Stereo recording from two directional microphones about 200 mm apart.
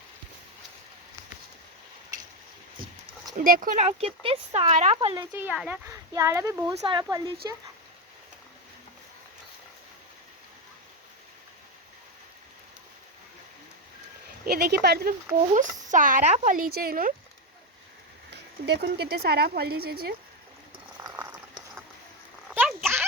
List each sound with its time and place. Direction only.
3.3 s speech: 45° right (ahead or behind)
4.9 s speech: 20° right (ahead or behind)
14.4 s speech: 50° right (ahead or behind)
15.5 s speech: 40° right (ahead or behind)
18.3 s speech: 55° right (ahead or behind)
21.0 s boiling: 10° right (ahead or behind)
22.4 s a sound: 5° right (ahead or behind)